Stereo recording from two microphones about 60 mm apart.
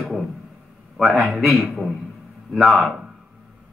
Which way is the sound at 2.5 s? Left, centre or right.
Centre.